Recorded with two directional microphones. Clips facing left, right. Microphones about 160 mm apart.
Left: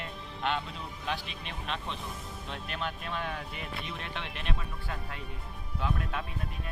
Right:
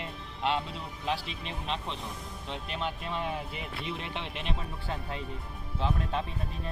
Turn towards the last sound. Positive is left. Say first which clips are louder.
# right 3 dB
turn(degrees=-30)  # may be behind; listen again after turning